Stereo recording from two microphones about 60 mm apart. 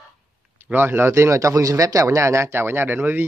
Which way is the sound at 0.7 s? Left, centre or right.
Right.